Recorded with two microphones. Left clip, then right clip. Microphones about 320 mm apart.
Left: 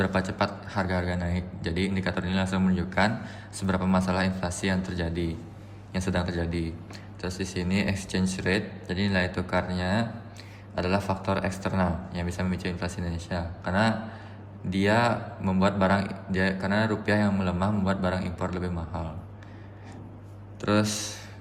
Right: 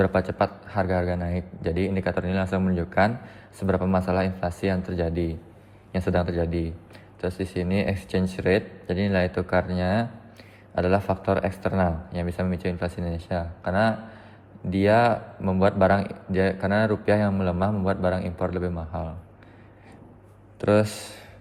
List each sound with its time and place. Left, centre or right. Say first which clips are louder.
0.0 s a man's voice: right 4 dB; centre
20.6 s a man's voice: right 5 dB; centre